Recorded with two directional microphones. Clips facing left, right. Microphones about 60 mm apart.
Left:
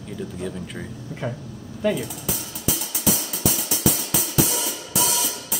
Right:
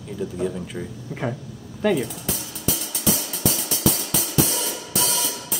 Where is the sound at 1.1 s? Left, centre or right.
Right.